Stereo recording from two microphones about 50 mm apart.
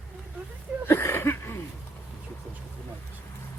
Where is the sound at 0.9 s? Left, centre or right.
Left.